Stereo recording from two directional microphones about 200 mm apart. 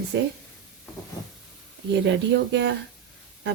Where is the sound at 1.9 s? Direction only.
60° right (ahead or behind).